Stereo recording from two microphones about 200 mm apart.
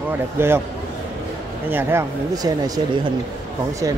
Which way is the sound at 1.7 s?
10° right (ahead or behind).